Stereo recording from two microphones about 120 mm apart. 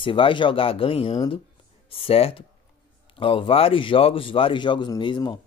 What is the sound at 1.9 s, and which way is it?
Speech, 50° left (ahead or behind).